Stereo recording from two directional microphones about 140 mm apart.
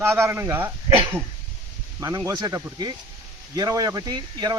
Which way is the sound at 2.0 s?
25° right (ahead or behind).